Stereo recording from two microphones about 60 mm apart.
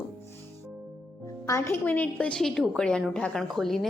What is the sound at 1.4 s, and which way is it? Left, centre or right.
Speech, left.